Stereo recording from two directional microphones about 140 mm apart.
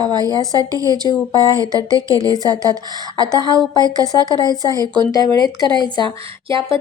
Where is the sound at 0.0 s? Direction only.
30° right (ahead or behind).